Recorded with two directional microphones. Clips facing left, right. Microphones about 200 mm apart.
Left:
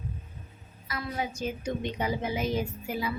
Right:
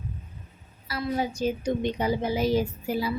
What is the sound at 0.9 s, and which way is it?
A woman's voice, 35° right (ahead or behind).